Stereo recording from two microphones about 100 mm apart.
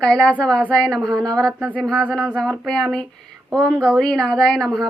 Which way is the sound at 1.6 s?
15° right (ahead or behind).